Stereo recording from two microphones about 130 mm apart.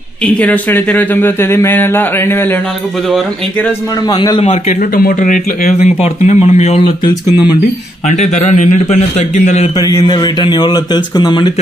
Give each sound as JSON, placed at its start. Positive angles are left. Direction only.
{"t": 0.2, "sound": "speech", "side_deg": 10}
{"t": 4.1, "sound": "a man's voice", "side_deg": 35}
{"t": 5.2, "sound": "a man's voice", "side_deg": 80}
{"t": 8.1, "sound": "a man's voice", "side_deg": 65}
{"t": 9.8, "sound": "speech", "side_deg": 30}